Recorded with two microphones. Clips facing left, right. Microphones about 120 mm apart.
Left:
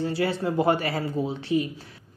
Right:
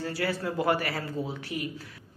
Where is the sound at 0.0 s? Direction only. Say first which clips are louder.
Left 5 dB; 20° left (ahead or behind).